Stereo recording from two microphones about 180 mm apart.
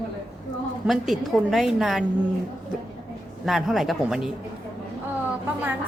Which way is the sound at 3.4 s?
Centre (ahead or behind).